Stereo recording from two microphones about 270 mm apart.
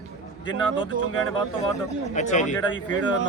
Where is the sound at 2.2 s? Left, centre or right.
Left.